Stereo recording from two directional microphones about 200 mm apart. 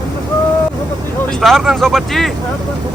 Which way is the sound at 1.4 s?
Centre (ahead or behind).